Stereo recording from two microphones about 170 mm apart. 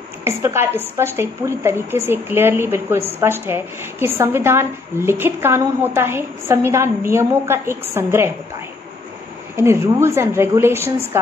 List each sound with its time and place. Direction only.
0.2 s a woman's voice: 15° right (ahead or behind)
9.6 s a woman's voice: 15° right (ahead or behind)